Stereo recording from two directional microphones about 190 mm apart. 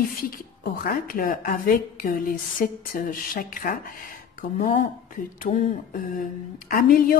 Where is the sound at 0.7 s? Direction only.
50° left (ahead or behind).